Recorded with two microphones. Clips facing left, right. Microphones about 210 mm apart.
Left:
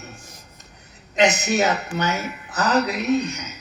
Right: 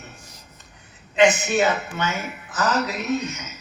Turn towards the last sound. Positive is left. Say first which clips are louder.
# left 4 dB
turn(degrees=35)  # may be behind; listen again after turning